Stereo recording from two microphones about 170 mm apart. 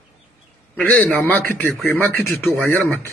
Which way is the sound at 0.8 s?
10° left (ahead or behind).